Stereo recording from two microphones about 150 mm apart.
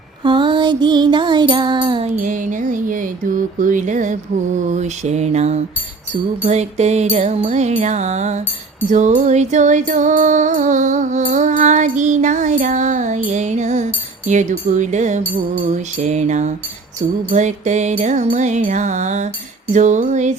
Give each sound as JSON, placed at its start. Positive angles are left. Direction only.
{"t": 0.2, "sound": "music", "side_deg": -30}
{"t": 2.1, "sound": "music", "side_deg": -60}